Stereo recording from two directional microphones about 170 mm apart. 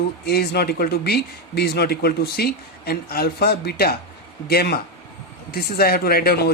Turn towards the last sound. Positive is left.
turn(degrees=65)  # may be behind; listen again after turning